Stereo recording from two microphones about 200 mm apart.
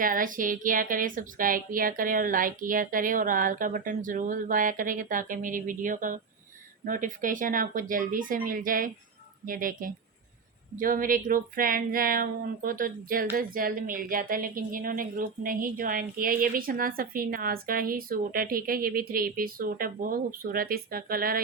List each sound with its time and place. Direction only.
0.0 s a woman's voice: 45° right (ahead or behind)